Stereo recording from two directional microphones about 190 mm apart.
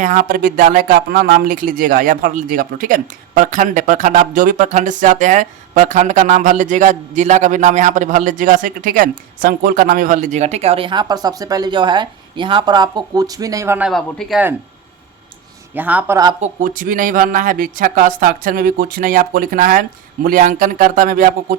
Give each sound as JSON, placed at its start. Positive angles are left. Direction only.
{"t": 0.0, "sound": "speech", "side_deg": -45}
{"t": 13.9, "sound": "speech", "side_deg": 0}
{"t": 15.7, "sound": "a man's voice", "side_deg": -10}
{"t": 16.4, "sound": "speech", "side_deg": -45}